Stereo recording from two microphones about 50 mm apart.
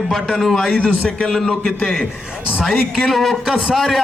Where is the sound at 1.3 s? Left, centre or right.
Centre.